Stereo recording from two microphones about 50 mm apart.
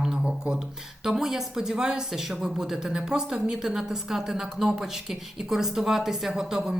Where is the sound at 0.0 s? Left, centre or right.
Centre.